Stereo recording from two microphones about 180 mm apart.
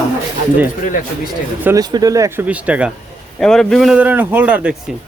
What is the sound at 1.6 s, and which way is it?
Speech, 10° right (ahead or behind).